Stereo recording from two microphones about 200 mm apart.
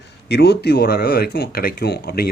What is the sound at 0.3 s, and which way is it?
Speech, 55° left (ahead or behind).